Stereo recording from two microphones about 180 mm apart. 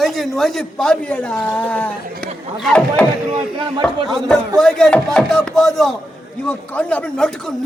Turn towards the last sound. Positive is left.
turn(degrees=5)  # may be behind; listen again after turning